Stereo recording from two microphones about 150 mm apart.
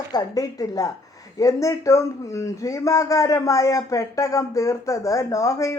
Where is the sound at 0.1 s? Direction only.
25° left (ahead or behind).